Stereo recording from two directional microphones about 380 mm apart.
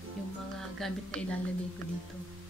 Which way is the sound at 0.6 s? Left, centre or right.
Centre.